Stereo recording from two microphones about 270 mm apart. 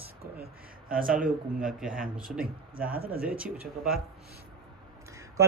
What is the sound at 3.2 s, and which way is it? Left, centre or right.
Speech, centre.